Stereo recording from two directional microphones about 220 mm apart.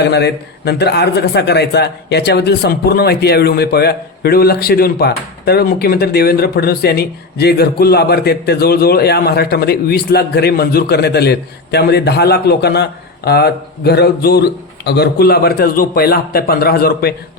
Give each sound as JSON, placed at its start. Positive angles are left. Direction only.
{"t": 0.1, "sound": "speech", "side_deg": 50}